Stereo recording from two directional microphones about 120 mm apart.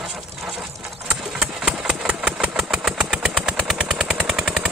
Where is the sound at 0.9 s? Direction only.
5° right (ahead or behind).